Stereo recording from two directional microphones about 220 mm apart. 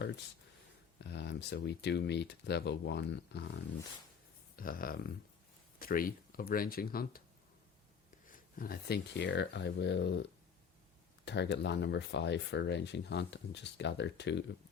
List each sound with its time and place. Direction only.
0.9 s speech: 50° left (ahead or behind)
8.3 s speech: 40° left (ahead or behind)
11.3 s speech: 50° left (ahead or behind)